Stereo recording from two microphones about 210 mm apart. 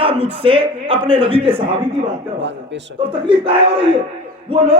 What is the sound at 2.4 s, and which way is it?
Speech, 60° right (ahead or behind).